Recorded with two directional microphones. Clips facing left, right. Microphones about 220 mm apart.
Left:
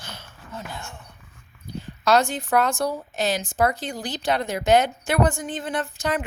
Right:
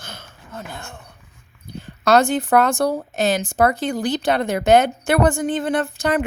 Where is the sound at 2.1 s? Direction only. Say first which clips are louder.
Right 5 dB; 60° right (ahead or behind).